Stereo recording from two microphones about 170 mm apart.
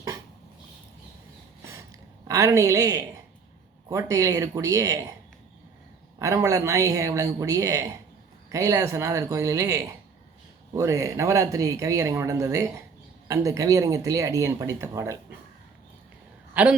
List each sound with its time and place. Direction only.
1.6 s a sound: 20° right (ahead or behind)
3.8 s speech: 20° right (ahead or behind)
6.1 s speech: 20° right (ahead or behind)